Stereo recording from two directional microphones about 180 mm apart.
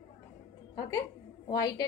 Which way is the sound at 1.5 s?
20° left (ahead or behind).